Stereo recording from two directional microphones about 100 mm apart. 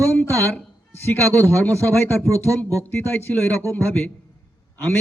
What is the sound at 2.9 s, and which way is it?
A man's voice, 15° left (ahead or behind).